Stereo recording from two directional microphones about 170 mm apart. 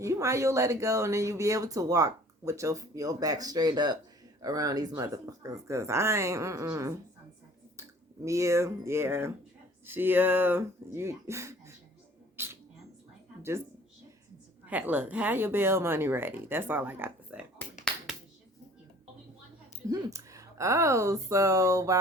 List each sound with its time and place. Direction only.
0.0 s speech: 15° right (ahead or behind)
12.4 s a sound: 15° right (ahead or behind)
14.7 s speech: 10° right (ahead or behind)
19.9 s speech: 20° right (ahead or behind)